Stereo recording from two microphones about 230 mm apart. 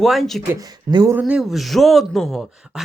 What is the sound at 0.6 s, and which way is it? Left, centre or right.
A man's voice, centre.